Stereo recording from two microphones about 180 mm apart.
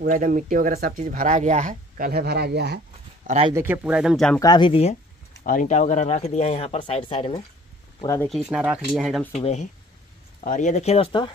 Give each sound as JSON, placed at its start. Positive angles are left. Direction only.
{"t": 0.0, "sound": "speech", "side_deg": -45}
{"t": 3.3, "sound": "speech", "side_deg": -45}
{"t": 3.6, "sound": "speech", "side_deg": -10}
{"t": 4.4, "sound": "speech", "side_deg": 25}
{"t": 5.4, "sound": "speech", "side_deg": 50}
{"t": 8.2, "sound": "speech", "side_deg": 0}
{"t": 9.3, "sound": "speech", "side_deg": 35}